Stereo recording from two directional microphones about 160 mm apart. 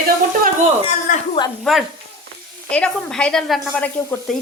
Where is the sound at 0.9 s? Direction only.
50° left (ahead or behind).